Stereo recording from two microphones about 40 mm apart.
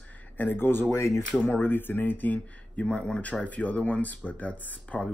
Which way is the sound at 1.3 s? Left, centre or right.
Left.